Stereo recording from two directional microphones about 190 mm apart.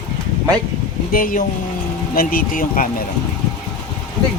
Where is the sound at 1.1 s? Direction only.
45° left (ahead or behind).